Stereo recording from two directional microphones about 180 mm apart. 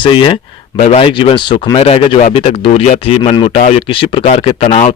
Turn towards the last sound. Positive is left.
turn(degrees=35)  # may be behind; listen again after turning